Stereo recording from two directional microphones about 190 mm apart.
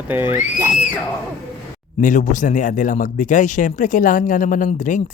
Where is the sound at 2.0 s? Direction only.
40° left (ahead or behind).